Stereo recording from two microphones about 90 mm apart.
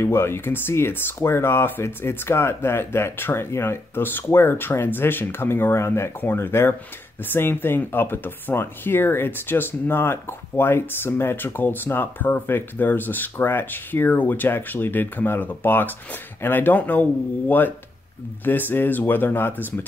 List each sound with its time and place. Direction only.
0.0 s speech: 30° left (ahead or behind)